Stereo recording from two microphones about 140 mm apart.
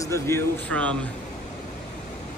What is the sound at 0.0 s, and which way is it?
Speech, 20° left (ahead or behind).